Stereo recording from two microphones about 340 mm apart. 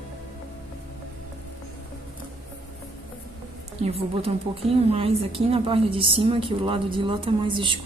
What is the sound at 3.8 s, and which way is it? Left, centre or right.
A woman's voice, centre.